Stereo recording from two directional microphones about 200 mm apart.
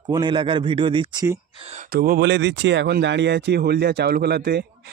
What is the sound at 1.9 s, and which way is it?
Speech, 50° right (ahead or behind).